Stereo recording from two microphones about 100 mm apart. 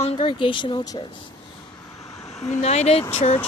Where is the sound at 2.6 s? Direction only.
90° left.